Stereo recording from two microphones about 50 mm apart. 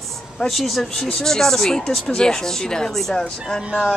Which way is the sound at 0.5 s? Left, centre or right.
Centre.